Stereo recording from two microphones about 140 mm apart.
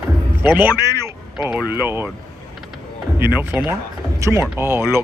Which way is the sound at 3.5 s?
15° right (ahead or behind).